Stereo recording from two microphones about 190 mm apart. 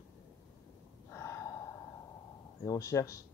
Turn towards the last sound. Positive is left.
turn(degrees=15)  # may be behind; listen again after turning